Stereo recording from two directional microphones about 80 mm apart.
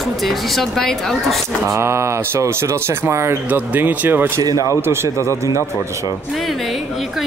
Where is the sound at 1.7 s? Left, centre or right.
Right.